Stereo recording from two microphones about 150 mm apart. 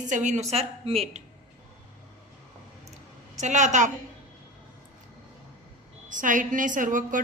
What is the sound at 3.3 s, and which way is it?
Speech, 55° right (ahead or behind).